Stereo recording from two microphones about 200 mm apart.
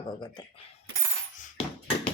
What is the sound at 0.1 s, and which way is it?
Speech, 25° left (ahead or behind).